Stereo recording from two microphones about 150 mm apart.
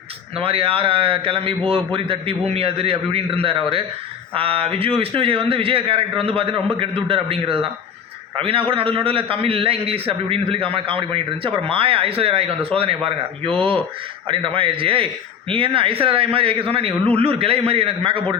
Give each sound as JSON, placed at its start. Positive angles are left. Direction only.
{"t": 0.3, "sound": "a man's voice", "side_deg": -40}